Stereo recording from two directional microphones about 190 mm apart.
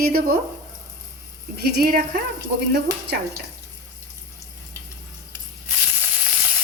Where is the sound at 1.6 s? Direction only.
55° right (ahead or behind).